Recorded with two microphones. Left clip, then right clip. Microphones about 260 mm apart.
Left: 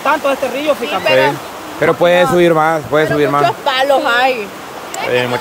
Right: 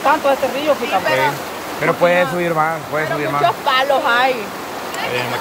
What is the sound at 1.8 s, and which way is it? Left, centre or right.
Speech, left.